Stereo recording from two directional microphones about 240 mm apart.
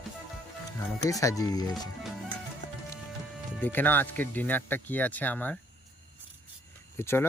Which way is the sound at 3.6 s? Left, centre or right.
Centre.